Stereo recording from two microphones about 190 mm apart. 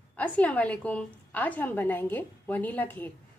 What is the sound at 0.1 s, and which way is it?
A woman's voice, 10° left (ahead or behind).